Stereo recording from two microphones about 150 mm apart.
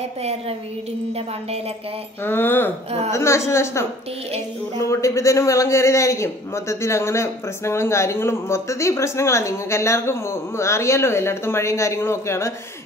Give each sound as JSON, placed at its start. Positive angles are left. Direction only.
{"t": 0.2, "sound": "a woman's voice", "side_deg": -45}
{"t": 2.2, "sound": "a woman's voice", "side_deg": 15}